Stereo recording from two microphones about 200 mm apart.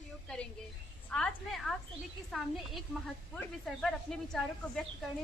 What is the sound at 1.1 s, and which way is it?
A woman's voice, centre (ahead or behind).